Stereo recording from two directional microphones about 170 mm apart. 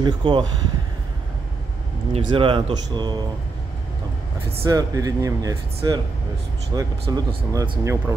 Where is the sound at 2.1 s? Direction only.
30° right (ahead or behind).